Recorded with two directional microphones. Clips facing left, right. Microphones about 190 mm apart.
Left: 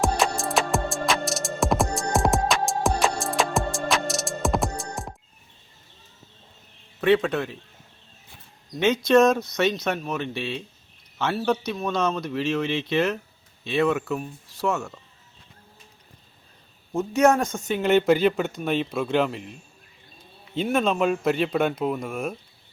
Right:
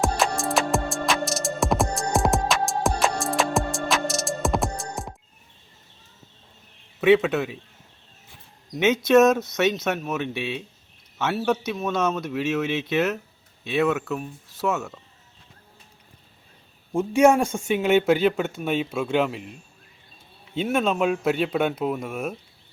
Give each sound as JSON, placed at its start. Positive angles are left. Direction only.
{"t": 0.0, "sound": "music", "side_deg": 0}
{"t": 7.0, "sound": "speech", "side_deg": -5}
{"t": 8.7, "sound": "speech", "side_deg": -5}
{"t": 16.9, "sound": "speech", "side_deg": -10}
{"t": 20.6, "sound": "speech", "side_deg": -5}